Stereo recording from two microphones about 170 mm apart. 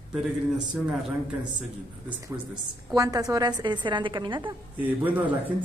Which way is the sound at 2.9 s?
20° right (ahead or behind).